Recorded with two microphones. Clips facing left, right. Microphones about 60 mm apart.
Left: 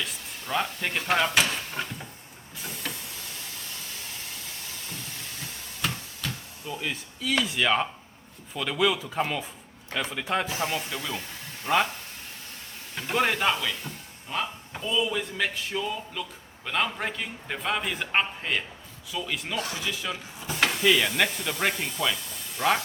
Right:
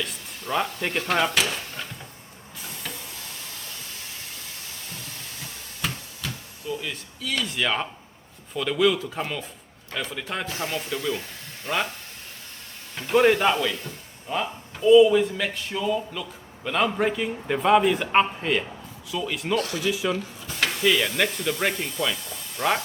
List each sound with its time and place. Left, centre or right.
0.0 s a man's voice: centre
5.8 s a sound: centre
6.8 s a man's voice: centre
13.0 s a man's voice: centre
19.5 s speech: centre
19.8 s speech: centre